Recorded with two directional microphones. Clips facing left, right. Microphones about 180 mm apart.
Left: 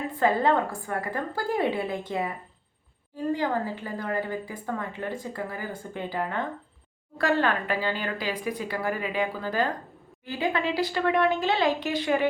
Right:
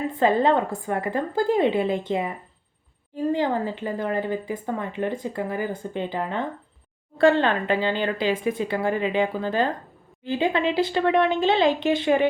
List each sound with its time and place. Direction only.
0.1 s a woman's voice: 20° right (ahead or behind)
3.3 s a woman's voice: 20° right (ahead or behind)